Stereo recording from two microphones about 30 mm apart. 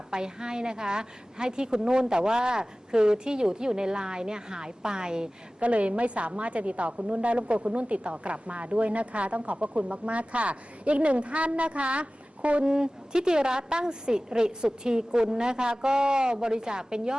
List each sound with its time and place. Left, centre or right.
0.1 s a woman's voice: right
5.5 s a woman's voice: right
12.6 s a woman's voice: right